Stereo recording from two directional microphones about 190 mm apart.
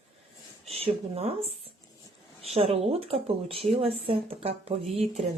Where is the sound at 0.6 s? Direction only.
30° right (ahead or behind).